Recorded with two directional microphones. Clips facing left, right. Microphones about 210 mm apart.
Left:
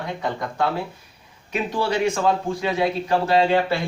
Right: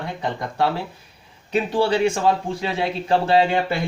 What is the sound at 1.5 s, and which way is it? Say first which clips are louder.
Speech: right 4 dB; 30° right (ahead or behind).